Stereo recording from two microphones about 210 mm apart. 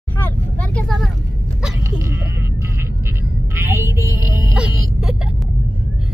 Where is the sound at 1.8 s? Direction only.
15° right (ahead or behind).